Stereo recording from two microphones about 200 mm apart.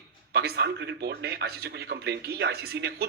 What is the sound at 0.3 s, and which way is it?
A man's voice, 55° right (ahead or behind).